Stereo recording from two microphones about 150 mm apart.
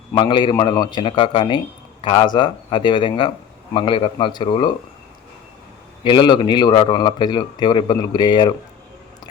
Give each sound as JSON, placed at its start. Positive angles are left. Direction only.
{"t": 0.1, "sound": "speech", "side_deg": 30}
{"t": 6.0, "sound": "a man's voice", "side_deg": 30}